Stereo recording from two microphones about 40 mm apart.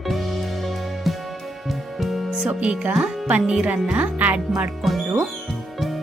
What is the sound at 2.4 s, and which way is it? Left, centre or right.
Speech, right.